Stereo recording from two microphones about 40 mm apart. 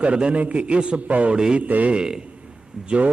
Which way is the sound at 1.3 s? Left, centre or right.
Centre.